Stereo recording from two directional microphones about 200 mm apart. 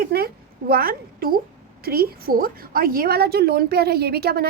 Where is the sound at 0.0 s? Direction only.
50° right (ahead or behind).